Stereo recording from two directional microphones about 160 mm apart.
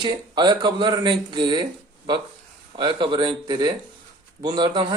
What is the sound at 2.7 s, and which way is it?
Speech, 30° right (ahead or behind).